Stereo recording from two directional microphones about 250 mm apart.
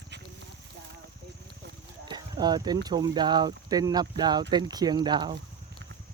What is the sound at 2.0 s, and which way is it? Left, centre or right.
Horse, centre.